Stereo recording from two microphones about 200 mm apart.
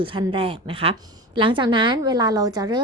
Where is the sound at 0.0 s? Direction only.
25° right (ahead or behind).